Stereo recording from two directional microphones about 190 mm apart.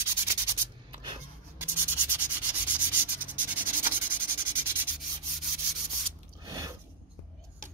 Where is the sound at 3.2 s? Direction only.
10° right (ahead or behind).